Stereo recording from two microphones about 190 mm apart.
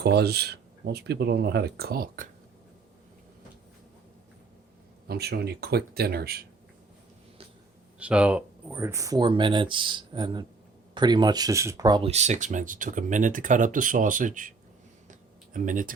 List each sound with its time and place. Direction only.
0.0 s speech: 60° right (ahead or behind)
5.0 s speech: 55° right (ahead or behind)
7.9 s speech: 5° right (ahead or behind); by 12.1 s 25° right (ahead or behind)
12.1 s speech: 35° right (ahead or behind)
15.5 s speech: 45° right (ahead or behind)